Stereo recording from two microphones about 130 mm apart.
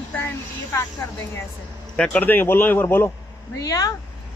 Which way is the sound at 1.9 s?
5° left (ahead or behind).